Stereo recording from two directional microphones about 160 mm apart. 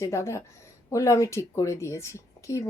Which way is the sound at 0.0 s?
20° left (ahead or behind).